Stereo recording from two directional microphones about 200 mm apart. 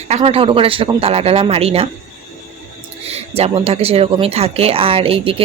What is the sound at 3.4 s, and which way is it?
Speech, 30° right (ahead or behind).